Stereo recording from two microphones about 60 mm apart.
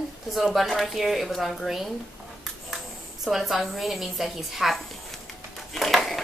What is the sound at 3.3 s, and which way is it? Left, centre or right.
Speech, centre.